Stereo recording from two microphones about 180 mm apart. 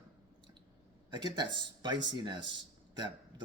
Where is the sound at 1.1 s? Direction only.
25° right (ahead or behind).